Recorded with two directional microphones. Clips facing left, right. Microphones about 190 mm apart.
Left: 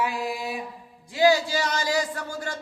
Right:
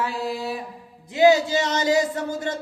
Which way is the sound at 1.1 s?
20° right (ahead or behind).